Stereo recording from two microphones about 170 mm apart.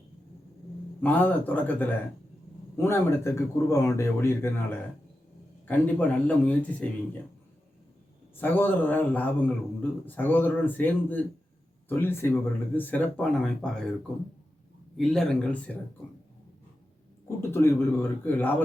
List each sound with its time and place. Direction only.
1.0 s speech: 10° left (ahead or behind)
8.4 s speech: 10° left (ahead or behind)
14.9 s speech: centre (ahead or behind)
17.2 s speech: 15° left (ahead or behind)